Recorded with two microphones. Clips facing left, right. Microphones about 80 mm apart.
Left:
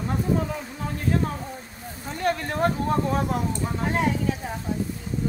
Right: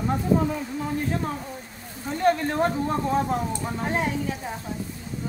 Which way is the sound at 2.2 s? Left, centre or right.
Right.